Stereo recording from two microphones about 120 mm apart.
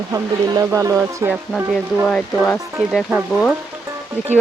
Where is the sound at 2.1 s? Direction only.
10° left (ahead or behind).